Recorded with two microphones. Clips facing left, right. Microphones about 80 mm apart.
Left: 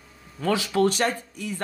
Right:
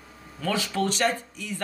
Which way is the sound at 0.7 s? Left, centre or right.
Left.